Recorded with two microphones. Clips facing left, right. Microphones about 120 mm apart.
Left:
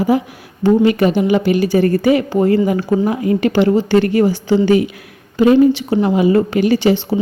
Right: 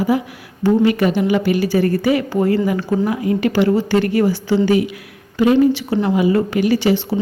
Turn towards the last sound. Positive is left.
turn(degrees=25)  # may be behind; listen again after turning